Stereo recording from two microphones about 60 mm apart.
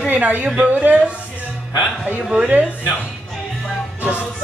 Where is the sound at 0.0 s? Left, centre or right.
Right.